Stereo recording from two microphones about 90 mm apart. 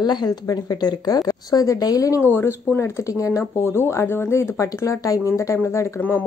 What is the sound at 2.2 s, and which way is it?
Speech, 25° left (ahead or behind).